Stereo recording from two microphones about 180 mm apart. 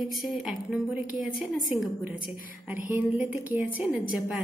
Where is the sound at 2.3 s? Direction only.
50° left (ahead or behind).